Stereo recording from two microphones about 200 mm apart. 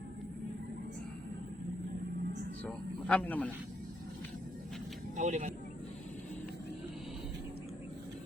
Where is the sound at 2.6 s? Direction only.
5° left (ahead or behind).